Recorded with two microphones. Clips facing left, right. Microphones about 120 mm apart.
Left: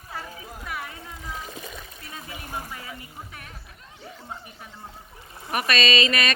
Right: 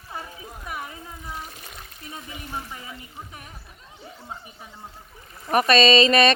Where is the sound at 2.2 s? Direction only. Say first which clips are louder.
Even; 40° left (ahead or behind).